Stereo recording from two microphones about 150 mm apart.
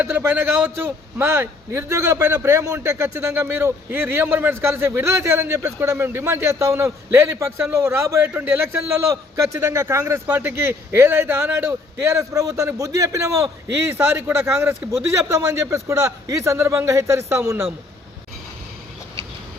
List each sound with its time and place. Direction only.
0.0 s a man's voice: 15° right (ahead or behind)